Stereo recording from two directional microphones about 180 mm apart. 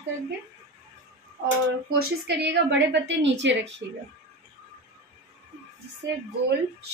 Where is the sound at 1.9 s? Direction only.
70° right (ahead or behind).